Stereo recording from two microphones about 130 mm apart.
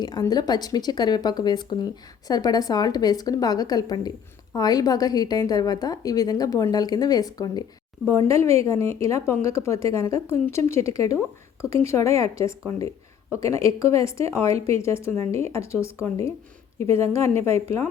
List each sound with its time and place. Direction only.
0.0 s a woman's voice: 30° left (ahead or behind)
15.1 s speech: 55° right (ahead or behind)
15.5 s a woman's voice: 20° left (ahead or behind)